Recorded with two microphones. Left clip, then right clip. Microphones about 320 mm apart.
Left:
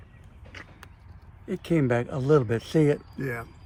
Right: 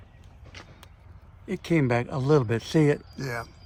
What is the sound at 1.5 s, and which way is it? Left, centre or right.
Speech, right.